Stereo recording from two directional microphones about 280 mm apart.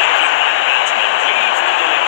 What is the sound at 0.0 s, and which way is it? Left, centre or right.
Vehicle, left.